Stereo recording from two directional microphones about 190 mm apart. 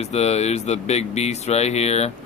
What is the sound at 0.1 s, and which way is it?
Speech, 35° left (ahead or behind).